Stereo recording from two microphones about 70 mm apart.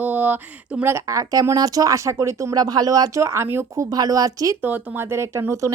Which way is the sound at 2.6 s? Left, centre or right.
Right.